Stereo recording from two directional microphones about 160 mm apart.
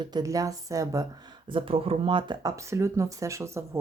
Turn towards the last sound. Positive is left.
turn(degrees=-15)  # may be behind; listen again after turning